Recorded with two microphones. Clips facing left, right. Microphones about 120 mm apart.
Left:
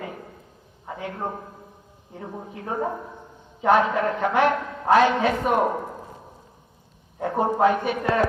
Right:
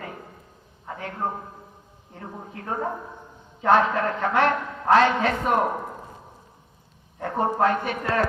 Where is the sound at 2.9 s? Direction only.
Centre (ahead or behind).